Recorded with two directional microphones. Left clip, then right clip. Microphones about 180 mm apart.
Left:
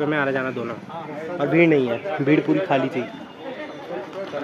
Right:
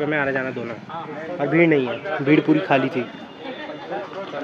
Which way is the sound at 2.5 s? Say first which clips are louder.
Right 2 dB; 5° right (ahead or behind).